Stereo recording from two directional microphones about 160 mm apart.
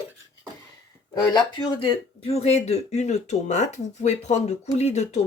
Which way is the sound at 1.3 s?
25° left (ahead or behind).